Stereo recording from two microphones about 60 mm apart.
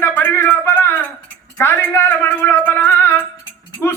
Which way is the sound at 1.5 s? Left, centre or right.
Left.